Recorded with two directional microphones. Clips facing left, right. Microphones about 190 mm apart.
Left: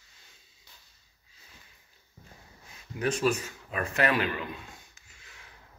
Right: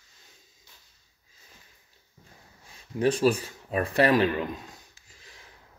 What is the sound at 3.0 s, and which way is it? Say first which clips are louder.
Speech: right 5 dB; 35° right (ahead or behind).